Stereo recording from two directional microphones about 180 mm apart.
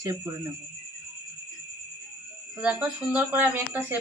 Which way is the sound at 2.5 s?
5° right (ahead or behind).